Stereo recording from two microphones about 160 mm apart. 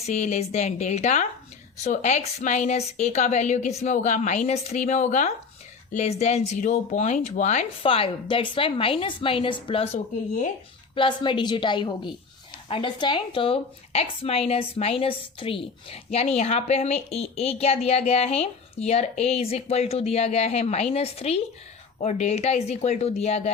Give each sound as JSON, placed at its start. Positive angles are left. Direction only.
{"t": 0.0, "sound": "a woman's voice", "side_deg": 45}
{"t": 7.8, "sound": "a woman's voice", "side_deg": 35}